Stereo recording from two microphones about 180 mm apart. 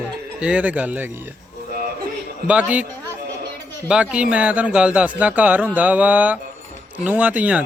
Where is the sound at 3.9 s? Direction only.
5° right (ahead or behind).